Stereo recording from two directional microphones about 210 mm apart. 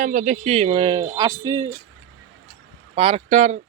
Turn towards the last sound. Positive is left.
turn(degrees=-35)  # may be behind; listen again after turning